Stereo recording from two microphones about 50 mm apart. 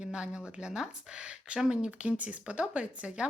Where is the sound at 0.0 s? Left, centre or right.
Right.